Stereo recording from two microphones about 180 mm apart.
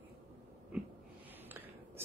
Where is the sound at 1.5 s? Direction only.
10° right (ahead or behind).